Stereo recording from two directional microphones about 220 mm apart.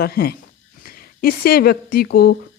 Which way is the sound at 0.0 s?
45° left (ahead or behind).